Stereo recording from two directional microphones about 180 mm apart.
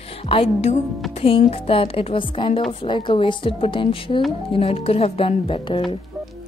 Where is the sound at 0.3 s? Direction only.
35° left (ahead or behind).